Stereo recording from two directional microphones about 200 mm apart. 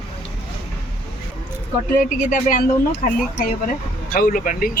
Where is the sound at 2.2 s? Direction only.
40° left (ahead or behind).